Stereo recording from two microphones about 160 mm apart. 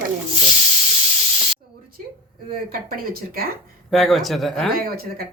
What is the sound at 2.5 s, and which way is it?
Speech, 65° right (ahead or behind).